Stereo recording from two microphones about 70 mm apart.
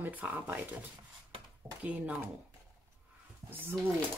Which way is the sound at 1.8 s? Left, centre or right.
Right.